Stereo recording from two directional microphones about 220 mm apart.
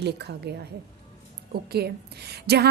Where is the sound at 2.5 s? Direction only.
50° right (ahead or behind).